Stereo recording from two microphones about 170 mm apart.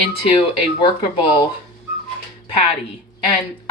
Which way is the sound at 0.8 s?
30° left (ahead or behind).